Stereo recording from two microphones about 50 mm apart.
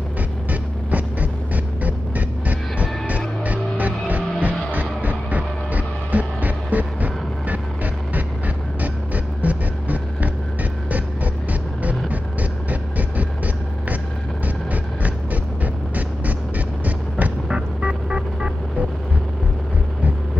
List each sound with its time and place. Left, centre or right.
0.5 s music: right
14.4 s music: right
17.5 s vehicle: right